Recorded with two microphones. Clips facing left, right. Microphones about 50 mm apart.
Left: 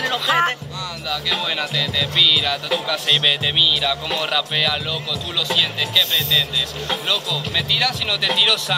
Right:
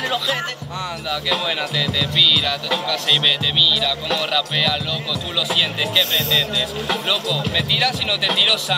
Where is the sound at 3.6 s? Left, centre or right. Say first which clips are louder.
Even; centre.